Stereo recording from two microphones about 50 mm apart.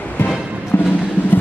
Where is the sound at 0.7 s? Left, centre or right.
Left.